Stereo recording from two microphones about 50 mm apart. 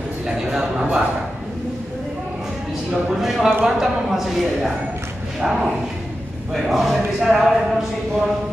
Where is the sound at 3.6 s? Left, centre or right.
Centre.